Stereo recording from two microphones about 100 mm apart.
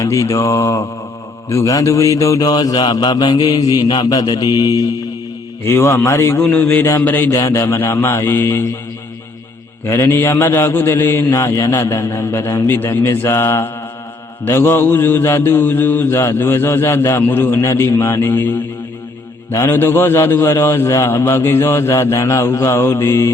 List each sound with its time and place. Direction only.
0.0 s mantra: 30° left (ahead or behind)
5.6 s mantra: 25° left (ahead or behind)
9.8 s mantra: 25° left (ahead or behind)